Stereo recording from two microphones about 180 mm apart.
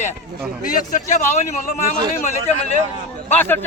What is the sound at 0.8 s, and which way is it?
Speech, 45° left (ahead or behind).